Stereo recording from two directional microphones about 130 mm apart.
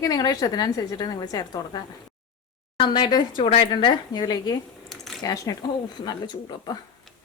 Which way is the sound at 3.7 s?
35° left (ahead or behind).